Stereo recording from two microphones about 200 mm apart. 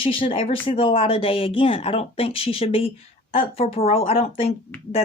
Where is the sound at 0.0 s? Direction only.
25° left (ahead or behind).